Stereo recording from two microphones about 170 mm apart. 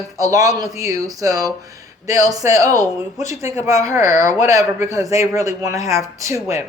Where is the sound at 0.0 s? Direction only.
20° right (ahead or behind).